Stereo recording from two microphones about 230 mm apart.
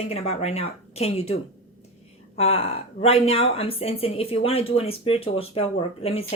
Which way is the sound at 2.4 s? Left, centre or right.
Left.